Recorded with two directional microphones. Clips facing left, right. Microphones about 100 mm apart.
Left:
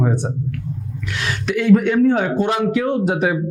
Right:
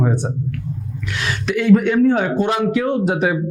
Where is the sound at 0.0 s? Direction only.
25° right (ahead or behind).